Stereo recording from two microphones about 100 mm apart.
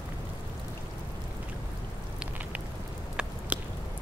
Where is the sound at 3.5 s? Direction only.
15° right (ahead or behind).